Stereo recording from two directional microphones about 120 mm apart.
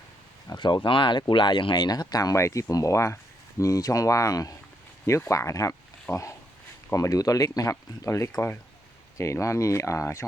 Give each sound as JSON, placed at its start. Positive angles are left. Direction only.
{"t": 0.4, "sound": "speech", "side_deg": 40}